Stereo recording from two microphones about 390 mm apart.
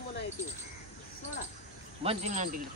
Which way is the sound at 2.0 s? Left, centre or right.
Centre.